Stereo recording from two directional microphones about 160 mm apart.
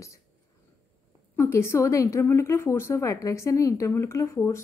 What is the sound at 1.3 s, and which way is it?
A woman's voice, 15° left (ahead or behind).